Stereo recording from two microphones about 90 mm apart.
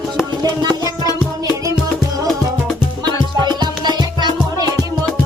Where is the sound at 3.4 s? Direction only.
55° right (ahead or behind).